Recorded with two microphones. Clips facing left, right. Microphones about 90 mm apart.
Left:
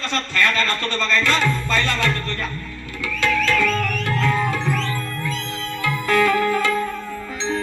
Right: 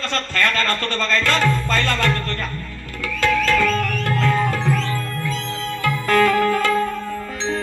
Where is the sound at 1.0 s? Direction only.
45° right (ahead or behind).